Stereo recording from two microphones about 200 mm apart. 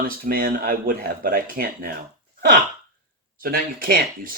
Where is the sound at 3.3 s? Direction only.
45° right (ahead or behind).